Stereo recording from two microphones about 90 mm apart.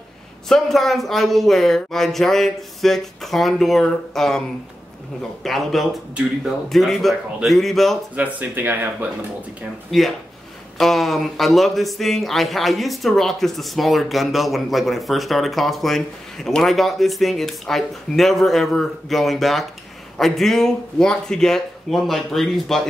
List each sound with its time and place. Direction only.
0.5 s speech: centre (ahead or behind)
8.2 s speech: 20° right (ahead or behind)
9.8 s speech: centre (ahead or behind)